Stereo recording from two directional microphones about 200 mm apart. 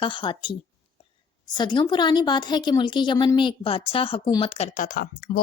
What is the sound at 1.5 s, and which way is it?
A woman's voice, 20° left (ahead or behind).